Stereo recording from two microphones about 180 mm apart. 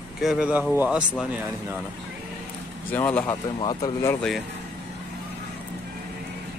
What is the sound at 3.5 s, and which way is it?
Speech, 20° left (ahead or behind).